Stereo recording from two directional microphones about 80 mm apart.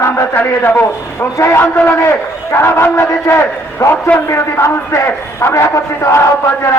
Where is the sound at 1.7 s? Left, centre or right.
Left.